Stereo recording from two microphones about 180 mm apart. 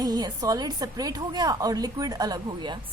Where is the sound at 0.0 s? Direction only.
20° right (ahead or behind).